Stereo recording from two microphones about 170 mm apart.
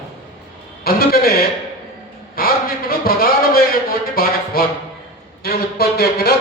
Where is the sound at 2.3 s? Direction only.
60° left (ahead or behind).